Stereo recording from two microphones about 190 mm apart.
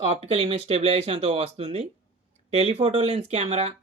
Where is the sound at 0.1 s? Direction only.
35° right (ahead or behind).